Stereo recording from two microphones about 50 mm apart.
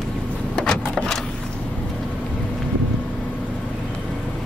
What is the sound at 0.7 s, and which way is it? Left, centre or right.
Vehicle, left.